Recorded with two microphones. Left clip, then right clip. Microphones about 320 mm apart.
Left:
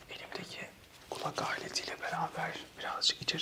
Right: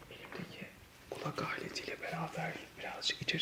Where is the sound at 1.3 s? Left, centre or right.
Left.